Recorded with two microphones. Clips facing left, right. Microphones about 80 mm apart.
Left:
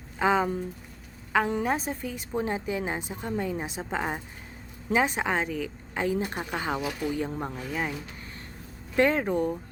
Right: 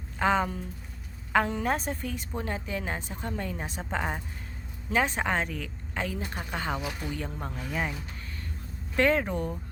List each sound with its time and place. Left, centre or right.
0.2 s a woman's voice: centre
1.6 s a woman's voice: centre
2.3 s a woman's voice: centre
7.7 s a woman's voice: centre
9.0 s speech: centre